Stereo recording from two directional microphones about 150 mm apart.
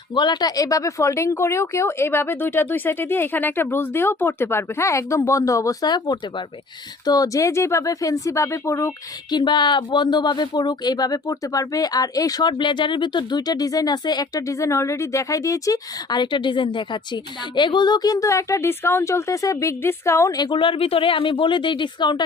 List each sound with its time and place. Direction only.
0.1 s speech: 30° left (ahead or behind)
9.3 s speech: 30° left (ahead or behind)